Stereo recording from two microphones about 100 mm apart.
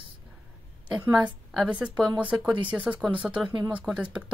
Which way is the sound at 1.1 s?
10° right (ahead or behind).